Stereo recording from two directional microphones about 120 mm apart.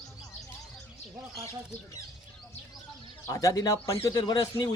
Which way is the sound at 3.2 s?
30° left (ahead or behind).